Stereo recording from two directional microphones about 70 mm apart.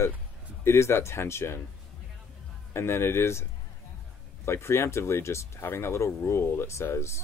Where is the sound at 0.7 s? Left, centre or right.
Left.